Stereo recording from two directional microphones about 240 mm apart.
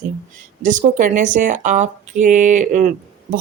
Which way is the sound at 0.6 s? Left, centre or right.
Right.